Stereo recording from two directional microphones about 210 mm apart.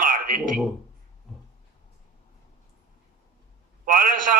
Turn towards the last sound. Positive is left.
turn(degrees=-40)  # may be behind; listen again after turning